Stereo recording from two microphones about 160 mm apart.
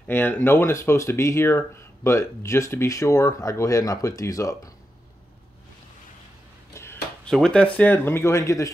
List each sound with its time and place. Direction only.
0.0 s speech: 10° left (ahead or behind)
6.7 s a sound: 15° left (ahead or behind)
7.2 s speech: 5° left (ahead or behind); by 8.7 s 20° left (ahead or behind)